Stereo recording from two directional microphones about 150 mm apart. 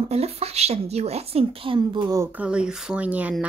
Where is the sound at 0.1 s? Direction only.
45° right (ahead or behind).